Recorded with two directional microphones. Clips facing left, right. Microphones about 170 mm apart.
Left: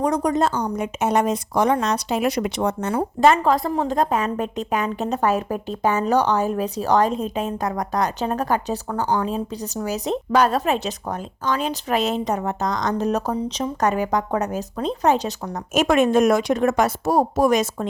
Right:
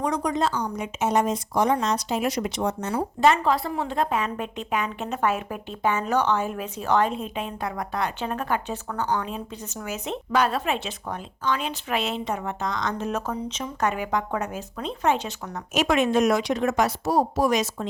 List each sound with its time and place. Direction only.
0.0 s speech: 45° left (ahead or behind)
15.7 s a woman's voice: 50° left (ahead or behind)